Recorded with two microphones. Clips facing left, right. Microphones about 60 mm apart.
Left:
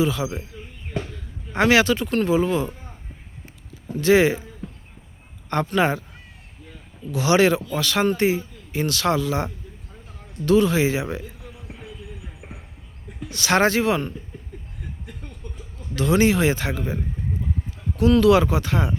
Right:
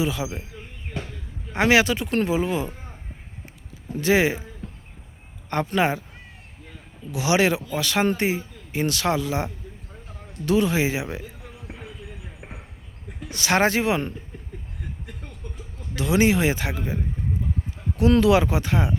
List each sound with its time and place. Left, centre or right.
0.0 s speech: centre
1.5 s speech: centre
3.9 s speech: centre
5.6 s speech: centre
7.1 s speech: centre
13.3 s speech: centre
16.0 s speech: centre
17.9 s speech: right